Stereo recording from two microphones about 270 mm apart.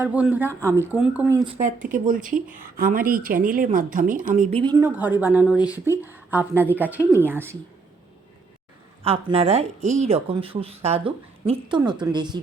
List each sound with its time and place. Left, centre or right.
0.0 s speech: centre
1.5 s a woman's voice: right
4.6 s speech: centre
9.0 s speech: right